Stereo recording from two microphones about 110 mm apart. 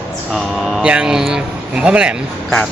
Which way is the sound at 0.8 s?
10° right (ahead or behind).